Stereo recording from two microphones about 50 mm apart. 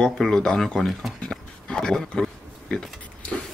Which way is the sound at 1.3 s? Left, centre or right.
Centre.